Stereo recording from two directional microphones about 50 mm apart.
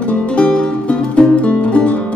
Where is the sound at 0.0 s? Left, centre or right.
Left.